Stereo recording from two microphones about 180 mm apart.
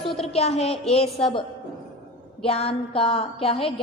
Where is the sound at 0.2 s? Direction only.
35° left (ahead or behind).